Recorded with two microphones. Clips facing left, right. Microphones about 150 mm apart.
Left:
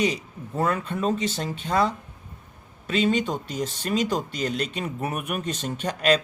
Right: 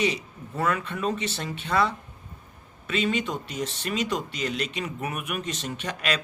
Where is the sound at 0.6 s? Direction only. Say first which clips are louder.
Left 2 dB; 35° left (ahead or behind).